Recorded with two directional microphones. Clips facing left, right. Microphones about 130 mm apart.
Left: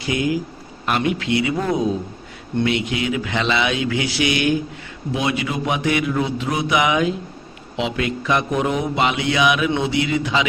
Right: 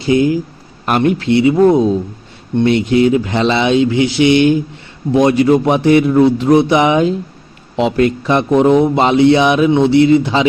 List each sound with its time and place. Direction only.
0.0 s a man's voice: 30° right (ahead or behind)
0.9 s speech: 45° right (ahead or behind)
1.3 s a man's voice: 30° right (ahead or behind)
5.1 s a man's voice: 40° right (ahead or behind)
7.8 s a man's voice: 45° right (ahead or behind)